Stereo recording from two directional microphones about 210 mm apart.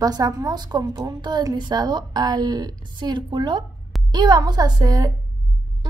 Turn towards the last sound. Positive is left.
turn(degrees=-15)  # may be behind; listen again after turning